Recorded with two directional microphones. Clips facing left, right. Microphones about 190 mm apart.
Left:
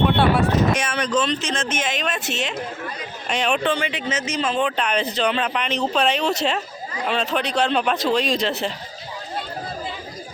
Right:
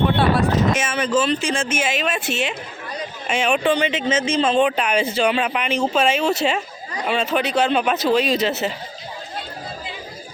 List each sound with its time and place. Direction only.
0.2 s speech: 5° right (ahead or behind)
3.8 s speech: 25° right (ahead or behind)
4.6 s speech: 10° right (ahead or behind)